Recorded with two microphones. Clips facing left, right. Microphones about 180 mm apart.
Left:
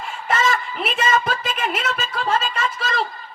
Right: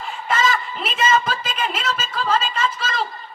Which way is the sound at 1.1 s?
65° left (ahead or behind).